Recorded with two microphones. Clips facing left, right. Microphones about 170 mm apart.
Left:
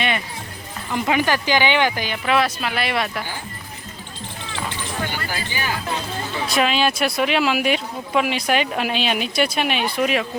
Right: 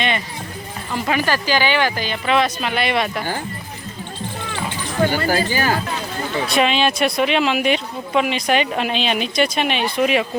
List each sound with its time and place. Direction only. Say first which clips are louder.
0.9 s speech: even; 15° left (ahead or behind)
2.2 s speech: right 1 dB; 5° left (ahead or behind)
5.0 s speech: right 10 dB; 45° right (ahead or behind)
6.5 s speech: right 1 dB; centre (ahead or behind)